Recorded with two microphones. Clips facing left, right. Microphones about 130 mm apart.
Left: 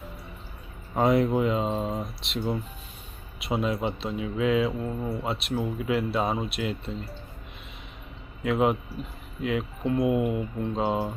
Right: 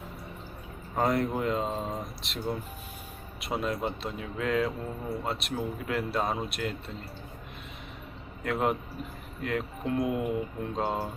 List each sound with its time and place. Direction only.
0.9 s a man's voice: 5° left (ahead or behind)
8.4 s a man's voice: 5° left (ahead or behind)